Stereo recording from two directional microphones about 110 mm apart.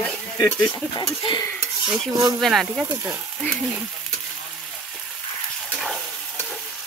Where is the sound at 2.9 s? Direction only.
25° right (ahead or behind).